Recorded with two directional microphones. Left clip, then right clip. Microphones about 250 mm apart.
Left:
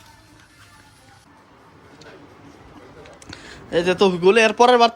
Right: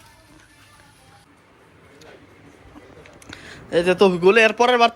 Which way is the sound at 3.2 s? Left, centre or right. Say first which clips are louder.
Right 1 dB; centre.